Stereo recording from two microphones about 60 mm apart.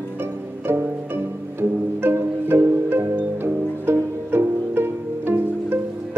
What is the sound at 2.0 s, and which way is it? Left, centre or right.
Music, right.